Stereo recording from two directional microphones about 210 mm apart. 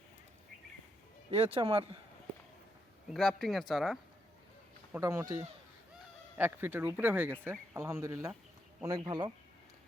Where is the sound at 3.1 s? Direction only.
Centre (ahead or behind).